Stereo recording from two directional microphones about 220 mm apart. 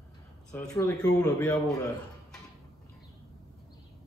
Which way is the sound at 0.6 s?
15° left (ahead or behind).